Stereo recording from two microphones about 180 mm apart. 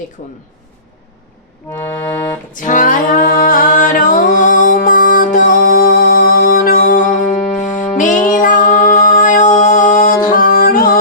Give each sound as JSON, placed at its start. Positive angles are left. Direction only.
{"t": 0.2, "sound": "speech", "side_deg": 55}
{"t": 2.5, "sound": "singing", "side_deg": 45}
{"t": 8.3, "sound": "music", "side_deg": 50}